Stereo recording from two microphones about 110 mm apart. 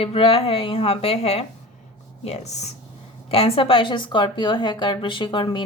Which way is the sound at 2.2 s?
85° left.